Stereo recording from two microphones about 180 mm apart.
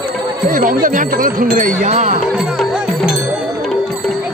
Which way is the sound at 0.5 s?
50° right (ahead or behind).